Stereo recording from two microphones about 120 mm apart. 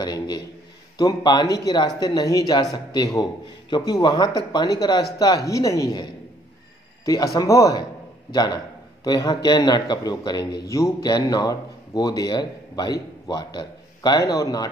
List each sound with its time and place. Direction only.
0.0 s a man's voice: 35° left (ahead or behind)
7.1 s a man's voice: 30° left (ahead or behind)